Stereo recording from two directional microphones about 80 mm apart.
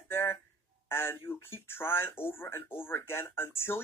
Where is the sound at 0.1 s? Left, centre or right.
Left.